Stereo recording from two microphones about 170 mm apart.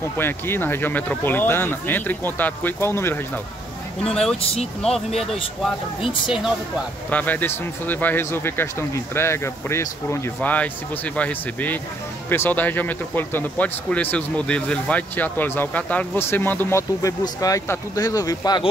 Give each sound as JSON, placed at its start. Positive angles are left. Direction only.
{"t": 0.2, "sound": "speech", "side_deg": 10}
{"t": 4.8, "sound": "speech", "side_deg": 0}
{"t": 6.0, "sound": "speech", "side_deg": 30}
{"t": 7.1, "sound": "speech", "side_deg": 10}